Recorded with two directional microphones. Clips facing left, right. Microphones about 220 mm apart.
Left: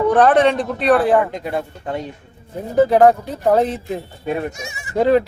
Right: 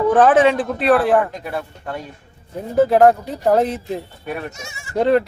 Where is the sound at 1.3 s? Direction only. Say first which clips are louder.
Left 3 dB; 20° left (ahead or behind).